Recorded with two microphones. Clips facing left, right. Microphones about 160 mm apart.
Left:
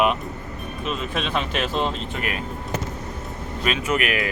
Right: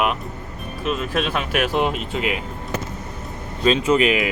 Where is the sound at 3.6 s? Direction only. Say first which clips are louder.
Right 7 dB; 25° right (ahead or behind).